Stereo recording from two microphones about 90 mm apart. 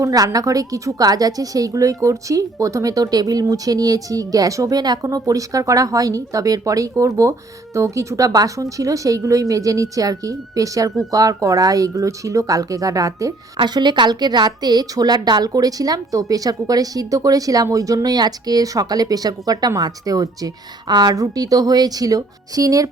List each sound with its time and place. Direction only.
0.0 s a woman's voice: 45° right (ahead or behind)
13.6 s a woman's voice: 55° right (ahead or behind)